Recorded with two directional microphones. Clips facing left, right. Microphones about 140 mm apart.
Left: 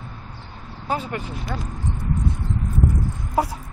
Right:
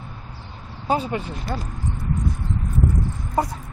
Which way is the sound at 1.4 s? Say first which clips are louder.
Right 1 dB; centre (ahead or behind).